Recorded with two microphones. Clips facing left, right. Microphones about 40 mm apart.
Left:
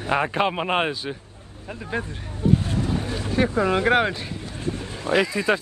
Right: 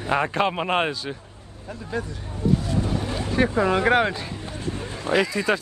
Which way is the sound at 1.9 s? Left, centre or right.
Left.